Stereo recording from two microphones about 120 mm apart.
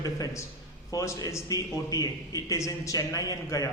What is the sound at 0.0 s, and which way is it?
A man's voice, 30° left (ahead or behind).